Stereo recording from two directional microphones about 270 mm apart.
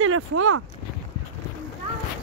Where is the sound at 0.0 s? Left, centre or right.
Right.